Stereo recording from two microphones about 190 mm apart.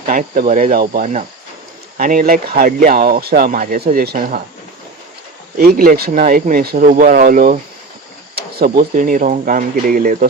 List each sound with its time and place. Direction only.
0.0 s speech: 45° right (ahead or behind)
5.5 s speech: 50° right (ahead or behind)